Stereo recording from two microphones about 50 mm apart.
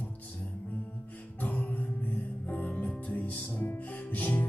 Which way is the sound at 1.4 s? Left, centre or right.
Left.